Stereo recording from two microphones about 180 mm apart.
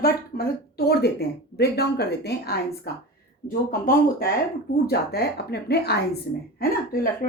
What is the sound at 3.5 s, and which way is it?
Speech, 50° left (ahead or behind).